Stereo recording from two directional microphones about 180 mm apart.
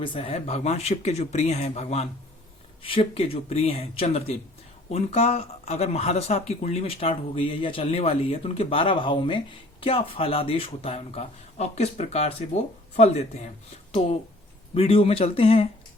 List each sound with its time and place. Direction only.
0.0 s speech: 30° left (ahead or behind)
14.7 s speech: 30° left (ahead or behind)